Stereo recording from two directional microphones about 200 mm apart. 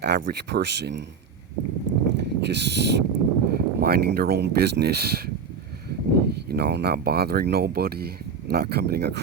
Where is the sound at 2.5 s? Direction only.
60° right (ahead or behind).